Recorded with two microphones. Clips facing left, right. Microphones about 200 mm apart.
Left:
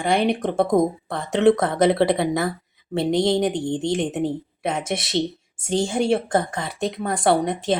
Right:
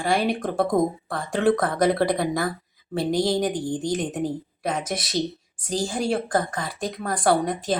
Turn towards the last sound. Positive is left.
turn(degrees=25)  # may be behind; listen again after turning